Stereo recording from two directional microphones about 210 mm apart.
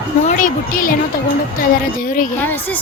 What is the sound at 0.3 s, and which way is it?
Speech, 40° left (ahead or behind).